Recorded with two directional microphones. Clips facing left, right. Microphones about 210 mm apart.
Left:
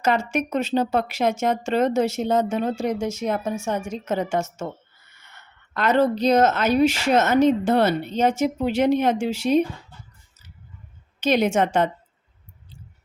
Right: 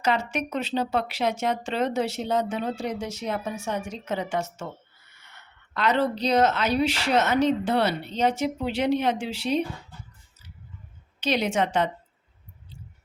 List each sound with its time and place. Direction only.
0.0 s speech: 45° left (ahead or behind)
5.7 s speech: 45° left (ahead or behind)
11.2 s speech: 45° left (ahead or behind)